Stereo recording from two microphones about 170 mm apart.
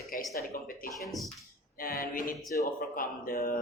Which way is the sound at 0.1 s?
55° left (ahead or behind).